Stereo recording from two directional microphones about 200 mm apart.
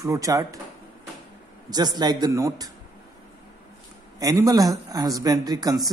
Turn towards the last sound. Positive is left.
turn(degrees=-20)  # may be behind; listen again after turning